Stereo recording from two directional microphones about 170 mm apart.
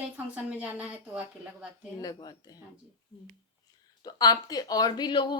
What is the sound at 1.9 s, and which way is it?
Speech, 20° left (ahead or behind).